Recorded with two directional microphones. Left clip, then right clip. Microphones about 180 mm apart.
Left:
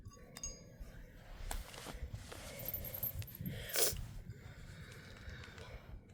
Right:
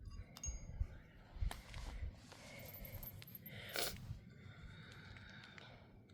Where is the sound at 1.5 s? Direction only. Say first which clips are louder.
Left 5 dB; 70° left (ahead or behind).